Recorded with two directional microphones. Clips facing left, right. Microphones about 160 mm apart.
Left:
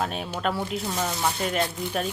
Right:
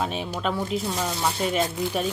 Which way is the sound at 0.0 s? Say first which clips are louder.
Right 1 dB; centre (ahead or behind).